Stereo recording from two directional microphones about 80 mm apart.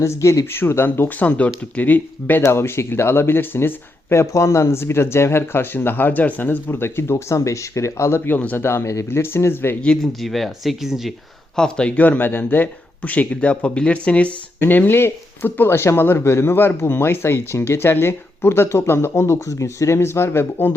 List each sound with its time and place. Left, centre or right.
0.0 s speech: left
2.4 s speech: left
8.2 s speech: left
9.8 s speech: centre
11.5 s speech: centre; by 20.7 s left